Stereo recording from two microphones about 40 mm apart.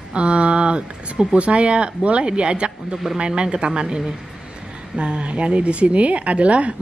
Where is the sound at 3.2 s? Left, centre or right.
Right.